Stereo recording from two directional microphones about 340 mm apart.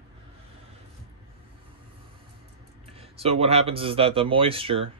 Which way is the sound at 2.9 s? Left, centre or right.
Centre.